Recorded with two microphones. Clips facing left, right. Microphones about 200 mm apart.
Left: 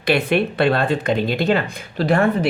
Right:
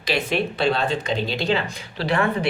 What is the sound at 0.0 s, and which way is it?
Speech, 60° left (ahead or behind).